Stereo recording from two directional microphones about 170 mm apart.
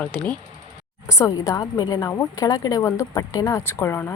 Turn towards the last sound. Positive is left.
turn(degrees=15)  # may be behind; listen again after turning